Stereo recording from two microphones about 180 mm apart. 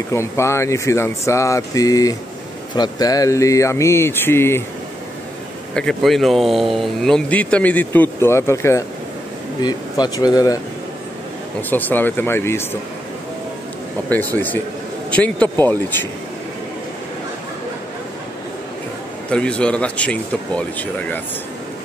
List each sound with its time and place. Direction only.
0.1 s speech: 15° left (ahead or behind)
5.8 s speech: 5° left (ahead or behind); by 10.6 s 20° left (ahead or behind)
11.7 s speech: 10° left (ahead or behind)
14.0 s speech: 10° left (ahead or behind)
19.3 s speech: 5° left (ahead or behind)